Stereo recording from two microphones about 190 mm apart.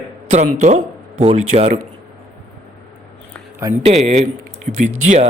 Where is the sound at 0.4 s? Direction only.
40° right (ahead or behind).